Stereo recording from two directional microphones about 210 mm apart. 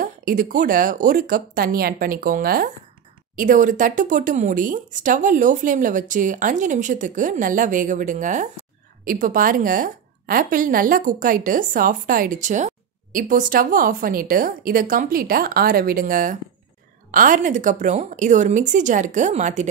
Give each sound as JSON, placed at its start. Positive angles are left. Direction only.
{"t": 0.0, "sound": "a woman's voice", "side_deg": -40}